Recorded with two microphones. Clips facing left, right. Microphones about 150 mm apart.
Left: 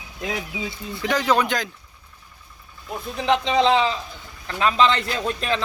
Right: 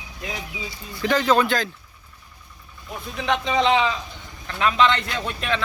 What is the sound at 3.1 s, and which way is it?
A man's voice, 30° left (ahead or behind).